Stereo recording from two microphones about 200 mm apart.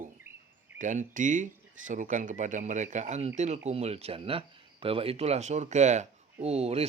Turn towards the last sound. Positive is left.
turn(degrees=-30)  # may be behind; listen again after turning